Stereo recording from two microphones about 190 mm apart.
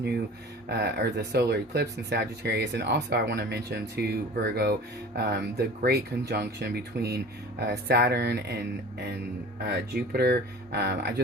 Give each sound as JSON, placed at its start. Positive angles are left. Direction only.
{"t": 0.7, "sound": "speech", "side_deg": -60}
{"t": 9.6, "sound": "speech", "side_deg": -55}